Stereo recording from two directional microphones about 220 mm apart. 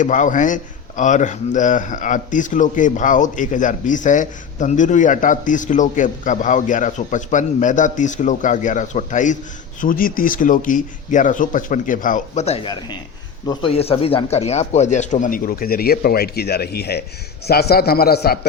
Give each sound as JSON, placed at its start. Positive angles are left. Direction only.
{"t": 0.0, "sound": "a man's voice", "side_deg": 35}